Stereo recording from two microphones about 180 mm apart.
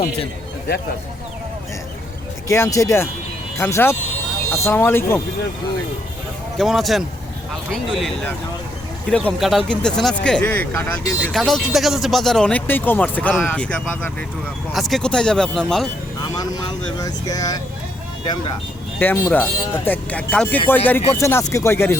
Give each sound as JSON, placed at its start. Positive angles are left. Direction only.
{"t": 2.5, "sound": "speech", "side_deg": 15}
{"t": 6.6, "sound": "speech", "side_deg": 0}
{"t": 16.2, "sound": "speech", "side_deg": 25}
{"t": 18.9, "sound": "speech", "side_deg": 10}